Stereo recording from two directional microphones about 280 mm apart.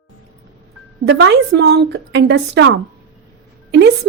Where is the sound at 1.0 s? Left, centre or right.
Right.